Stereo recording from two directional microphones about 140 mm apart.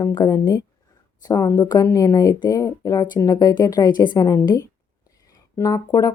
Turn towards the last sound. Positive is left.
turn(degrees=25)  # may be behind; listen again after turning